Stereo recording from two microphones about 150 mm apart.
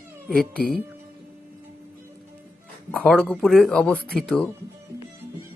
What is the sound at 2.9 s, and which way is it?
Speech, 5° left (ahead or behind).